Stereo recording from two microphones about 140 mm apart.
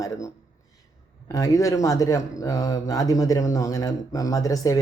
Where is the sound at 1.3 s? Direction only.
25° left (ahead or behind).